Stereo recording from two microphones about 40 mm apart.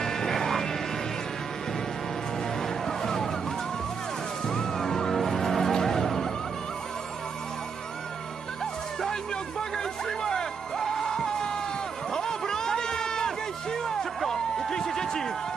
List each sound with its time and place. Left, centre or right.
0.0 s music: centre
2.6 s music: centre
4.4 s music: centre
9.6 s music: centre
12.1 s a sound: centre
14.3 s music: centre